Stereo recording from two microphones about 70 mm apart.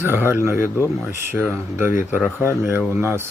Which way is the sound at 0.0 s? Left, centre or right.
Right.